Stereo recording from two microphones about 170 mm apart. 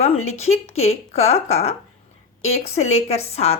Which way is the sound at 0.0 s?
40° left (ahead or behind).